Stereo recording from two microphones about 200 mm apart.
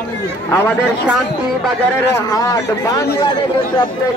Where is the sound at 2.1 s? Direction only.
15° left (ahead or behind).